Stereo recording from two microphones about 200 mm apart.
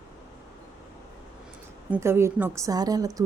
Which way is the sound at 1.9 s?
10° right (ahead or behind).